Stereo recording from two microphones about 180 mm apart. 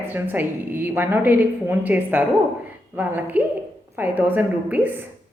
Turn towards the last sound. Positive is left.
turn(degrees=-10)  # may be behind; listen again after turning